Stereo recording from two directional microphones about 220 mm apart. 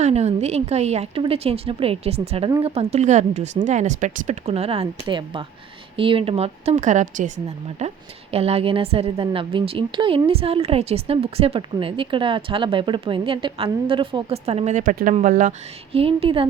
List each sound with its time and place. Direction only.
0.0 s speech: 30° right (ahead or behind)